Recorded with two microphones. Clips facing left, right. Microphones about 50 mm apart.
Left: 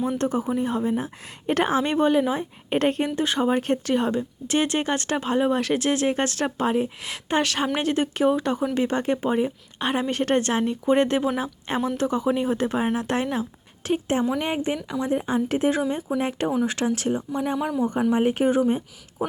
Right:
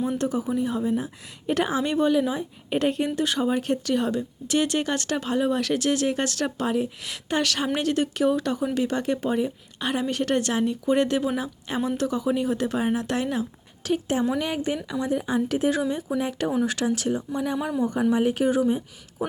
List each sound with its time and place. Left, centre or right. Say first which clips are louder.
0.2 s a woman's voice: left 1 dB; left
3.2 s speech: left 2 dB; left